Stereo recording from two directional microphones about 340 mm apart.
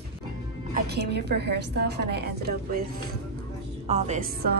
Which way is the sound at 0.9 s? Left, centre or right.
Right.